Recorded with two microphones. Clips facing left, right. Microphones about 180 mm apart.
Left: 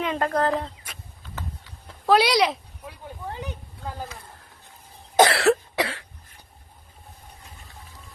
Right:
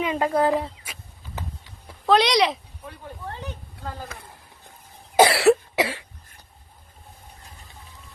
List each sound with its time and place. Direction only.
0.0 s speech: 5° right (ahead or behind)
1.4 s clip-clop: 15° right (ahead or behind)
2.0 s speech: 5° left (ahead or behind)
3.2 s a sound: 15° left (ahead or behind)
5.1 s cough: 5° right (ahead or behind)